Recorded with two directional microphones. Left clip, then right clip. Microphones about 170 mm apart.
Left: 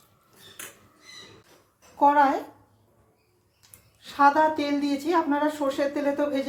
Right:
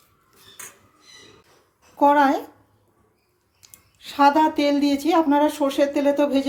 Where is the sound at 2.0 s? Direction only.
55° right (ahead or behind).